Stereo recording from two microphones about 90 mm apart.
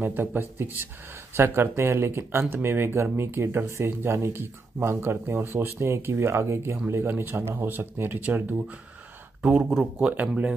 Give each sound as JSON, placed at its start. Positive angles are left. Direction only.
{"t": 0.0, "sound": "speech", "side_deg": -20}